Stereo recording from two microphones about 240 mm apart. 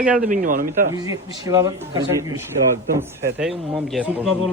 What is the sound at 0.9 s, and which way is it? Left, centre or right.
A man's voice, centre.